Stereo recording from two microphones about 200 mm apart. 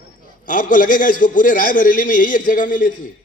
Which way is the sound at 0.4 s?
40° left (ahead or behind).